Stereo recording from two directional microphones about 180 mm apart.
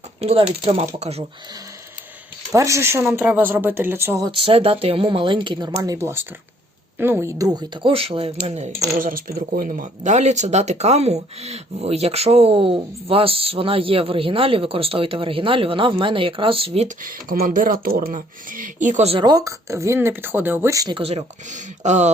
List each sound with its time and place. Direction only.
0.2 s speech: 35° right (ahead or behind)
2.5 s speech: 15° right (ahead or behind)
4.3 s speech: 30° right (ahead or behind)
9.0 s speech: 50° right (ahead or behind); by 16.9 s 35° right (ahead or behind)
17.0 s speech: 50° right (ahead or behind)
19.2 s speech: 20° right (ahead or behind)
21.0 s speech: 35° right (ahead or behind)